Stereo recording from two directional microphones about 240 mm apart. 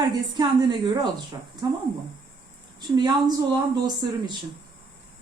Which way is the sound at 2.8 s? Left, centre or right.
Centre.